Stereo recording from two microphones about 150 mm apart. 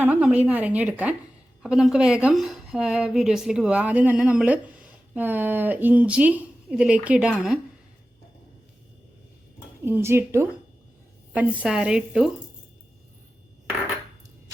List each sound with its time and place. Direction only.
0.0 s a woman's voice: 10° right (ahead or behind)
9.8 s a woman's voice: 15° right (ahead or behind)